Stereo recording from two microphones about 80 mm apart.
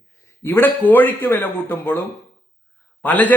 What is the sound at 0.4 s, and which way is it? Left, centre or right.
A man's voice, left.